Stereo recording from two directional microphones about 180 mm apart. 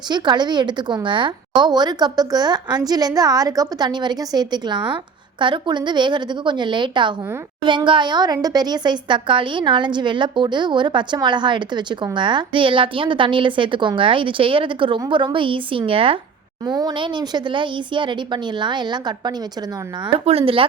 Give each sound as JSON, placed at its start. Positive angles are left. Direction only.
{"t": 0.1, "sound": "speech", "side_deg": -25}